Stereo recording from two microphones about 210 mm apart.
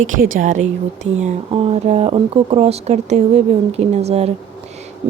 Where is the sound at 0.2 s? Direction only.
35° right (ahead or behind).